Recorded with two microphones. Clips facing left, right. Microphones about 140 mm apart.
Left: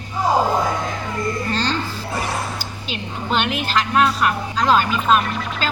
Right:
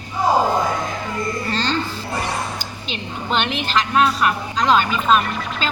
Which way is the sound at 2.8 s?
5° left (ahead or behind).